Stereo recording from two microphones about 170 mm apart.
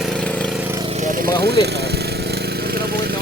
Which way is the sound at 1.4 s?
70° right (ahead or behind).